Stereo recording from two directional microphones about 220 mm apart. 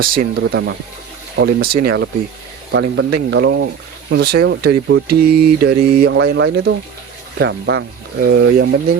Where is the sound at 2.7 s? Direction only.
55° right (ahead or behind).